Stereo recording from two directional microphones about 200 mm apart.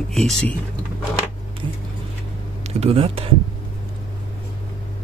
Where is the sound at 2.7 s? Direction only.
30° right (ahead or behind).